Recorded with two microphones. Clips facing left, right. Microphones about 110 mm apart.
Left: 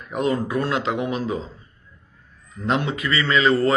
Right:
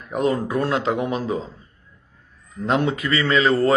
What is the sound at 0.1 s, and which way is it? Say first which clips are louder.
A man's voice: right 1 dB; 40° right (ahead or behind).